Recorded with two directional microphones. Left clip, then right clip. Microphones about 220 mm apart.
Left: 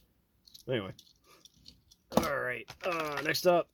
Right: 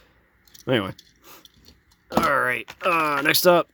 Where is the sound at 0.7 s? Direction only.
40° right (ahead or behind).